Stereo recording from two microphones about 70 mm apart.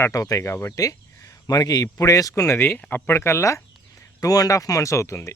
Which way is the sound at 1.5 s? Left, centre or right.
Left.